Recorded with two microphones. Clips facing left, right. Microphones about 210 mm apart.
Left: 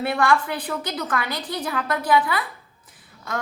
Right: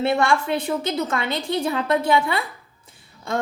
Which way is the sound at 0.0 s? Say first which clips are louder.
Right 1 dB; 25° right (ahead or behind).